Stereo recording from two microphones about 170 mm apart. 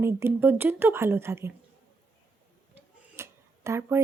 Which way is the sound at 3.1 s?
15° right (ahead or behind).